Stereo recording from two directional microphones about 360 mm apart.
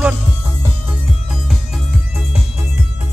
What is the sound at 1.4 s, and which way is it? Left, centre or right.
Music, centre.